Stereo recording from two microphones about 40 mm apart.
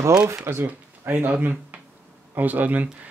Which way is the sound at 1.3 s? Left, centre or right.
Right.